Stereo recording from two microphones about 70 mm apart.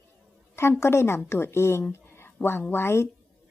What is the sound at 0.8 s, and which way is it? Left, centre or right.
A woman's voice, left.